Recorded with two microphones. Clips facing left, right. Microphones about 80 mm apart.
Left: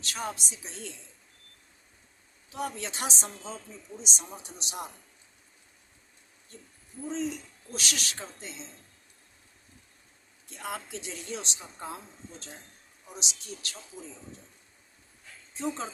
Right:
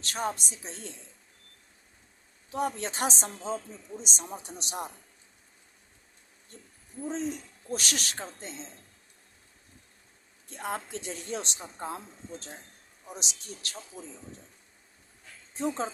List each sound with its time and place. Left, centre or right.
0.0 s a woman's voice: right
2.5 s a woman's voice: right
7.0 s a woman's voice: right
10.5 s a woman's voice: right
15.5 s a woman's voice: right